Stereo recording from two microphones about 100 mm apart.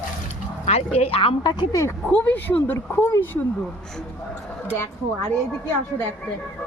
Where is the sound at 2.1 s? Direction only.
15° left (ahead or behind).